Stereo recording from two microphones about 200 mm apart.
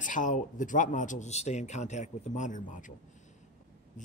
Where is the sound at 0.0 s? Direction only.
40° left (ahead or behind).